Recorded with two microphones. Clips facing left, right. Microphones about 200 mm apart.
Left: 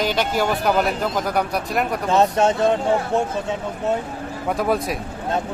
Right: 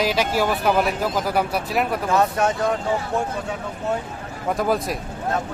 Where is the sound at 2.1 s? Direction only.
25° left (ahead or behind).